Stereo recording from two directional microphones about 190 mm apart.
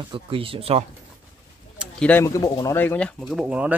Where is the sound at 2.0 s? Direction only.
10° left (ahead or behind); by 3.7 s 5° right (ahead or behind).